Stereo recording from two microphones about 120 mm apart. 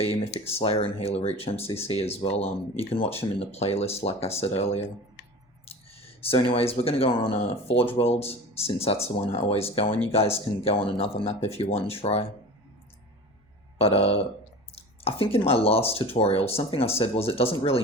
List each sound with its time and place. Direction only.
0.4 s speech: 55° left (ahead or behind)
13.7 s speech: 55° left (ahead or behind)